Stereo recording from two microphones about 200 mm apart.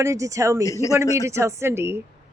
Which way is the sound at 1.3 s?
15° right (ahead or behind).